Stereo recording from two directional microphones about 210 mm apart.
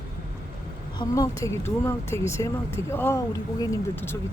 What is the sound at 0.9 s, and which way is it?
Speech, 15° left (ahead or behind).